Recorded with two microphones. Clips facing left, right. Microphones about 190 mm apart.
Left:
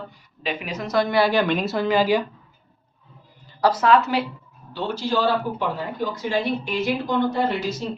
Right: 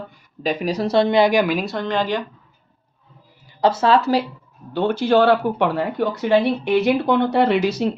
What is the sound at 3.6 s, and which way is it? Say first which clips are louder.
Speech: right 2 dB; 25° right (ahead or behind).